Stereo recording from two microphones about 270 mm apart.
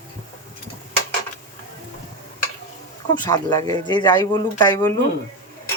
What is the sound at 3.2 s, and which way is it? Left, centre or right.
Speech, centre.